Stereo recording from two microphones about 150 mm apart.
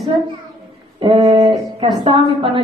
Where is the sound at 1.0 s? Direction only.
30° right (ahead or behind).